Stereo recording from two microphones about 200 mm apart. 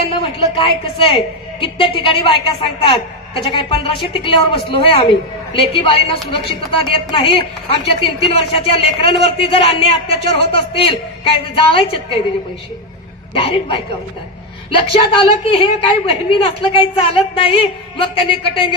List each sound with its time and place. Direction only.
0.1 s a woman's voice: 25° left (ahead or behind)
13.3 s a woman's voice: 25° left (ahead or behind)